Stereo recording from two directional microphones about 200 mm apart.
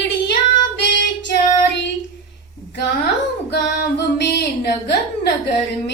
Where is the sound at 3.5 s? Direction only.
55° left (ahead or behind).